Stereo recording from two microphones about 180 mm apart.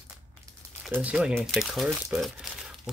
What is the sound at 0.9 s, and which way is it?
Speech, 5° right (ahead or behind).